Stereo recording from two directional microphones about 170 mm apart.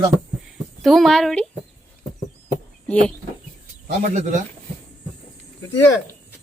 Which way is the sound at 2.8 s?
5° left (ahead or behind).